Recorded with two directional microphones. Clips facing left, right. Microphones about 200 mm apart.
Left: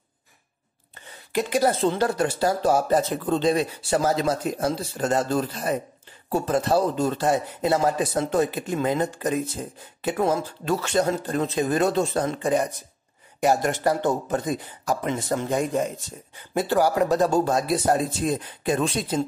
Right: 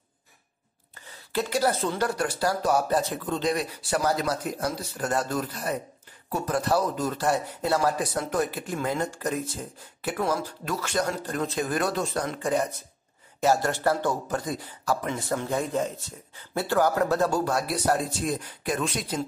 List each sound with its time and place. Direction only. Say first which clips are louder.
1.3 s speech: left 3 dB; 15° left (ahead or behind)